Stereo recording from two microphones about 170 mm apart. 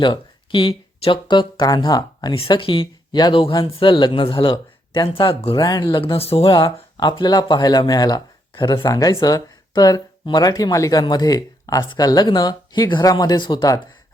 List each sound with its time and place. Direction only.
0.0 s speech: 30° left (ahead or behind)